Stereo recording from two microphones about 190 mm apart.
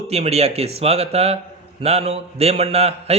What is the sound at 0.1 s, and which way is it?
A man's voice, 35° right (ahead or behind).